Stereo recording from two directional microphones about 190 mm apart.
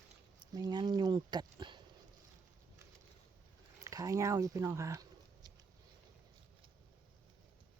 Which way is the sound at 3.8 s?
15° right (ahead or behind).